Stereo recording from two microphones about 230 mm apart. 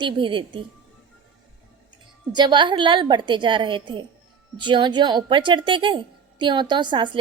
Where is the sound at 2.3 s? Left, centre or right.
Centre.